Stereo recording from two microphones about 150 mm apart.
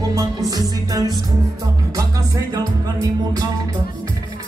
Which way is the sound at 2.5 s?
25° right (ahead or behind).